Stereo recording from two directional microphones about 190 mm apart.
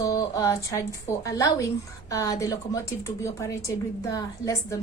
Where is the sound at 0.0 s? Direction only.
20° left (ahead or behind).